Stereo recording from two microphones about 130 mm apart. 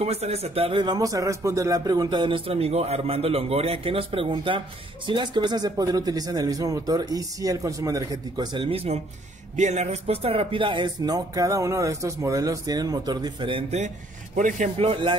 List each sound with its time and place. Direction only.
0.0 s a man's voice: 55° right (ahead or behind); by 8.6 s 30° right (ahead or behind)
8.6 s speech: 50° right (ahead or behind)
9.6 s a man's voice: 60° right (ahead or behind); by 13.7 s 45° right (ahead or behind)
13.7 s speech: 75° right (ahead or behind)
14.8 s speech: 45° right (ahead or behind)